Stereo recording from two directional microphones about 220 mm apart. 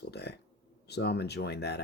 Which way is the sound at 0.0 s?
50° left (ahead or behind).